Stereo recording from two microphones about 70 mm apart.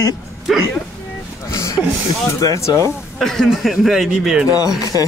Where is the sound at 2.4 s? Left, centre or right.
Left.